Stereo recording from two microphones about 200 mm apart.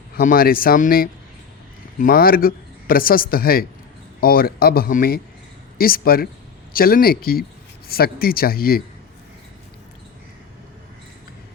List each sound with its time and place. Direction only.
0.2 s speech: 45° left (ahead or behind)